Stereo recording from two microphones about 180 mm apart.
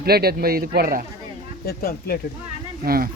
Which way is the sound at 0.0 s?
60° right (ahead or behind).